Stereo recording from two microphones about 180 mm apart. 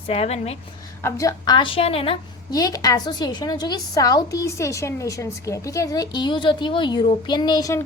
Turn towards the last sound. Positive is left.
turn(degrees=20)  # may be behind; listen again after turning